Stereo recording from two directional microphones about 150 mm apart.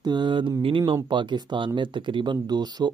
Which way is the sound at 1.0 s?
30° right (ahead or behind).